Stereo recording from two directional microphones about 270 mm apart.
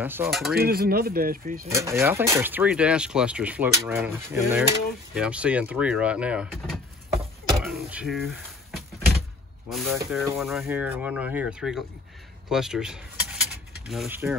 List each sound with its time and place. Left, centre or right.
0.0 s speech: centre
0.6 s speech: right
1.7 s speech: centre
7.6 s a sound: centre
9.7 s speech: centre